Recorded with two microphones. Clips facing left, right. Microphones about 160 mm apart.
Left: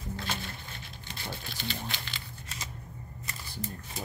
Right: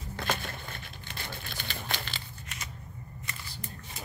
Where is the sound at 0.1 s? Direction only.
55° right (ahead or behind).